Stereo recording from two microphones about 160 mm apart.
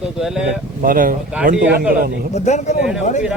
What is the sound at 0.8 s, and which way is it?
Speech, 60° right (ahead or behind).